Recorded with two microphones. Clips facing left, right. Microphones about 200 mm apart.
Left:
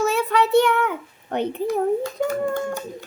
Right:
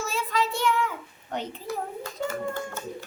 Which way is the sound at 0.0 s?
65° left (ahead or behind).